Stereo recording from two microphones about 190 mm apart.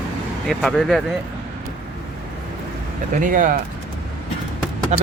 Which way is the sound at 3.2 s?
45° right (ahead or behind).